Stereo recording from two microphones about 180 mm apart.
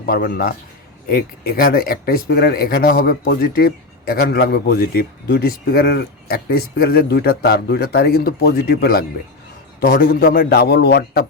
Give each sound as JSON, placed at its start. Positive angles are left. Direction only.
{"t": 0.0, "sound": "speech", "side_deg": 55}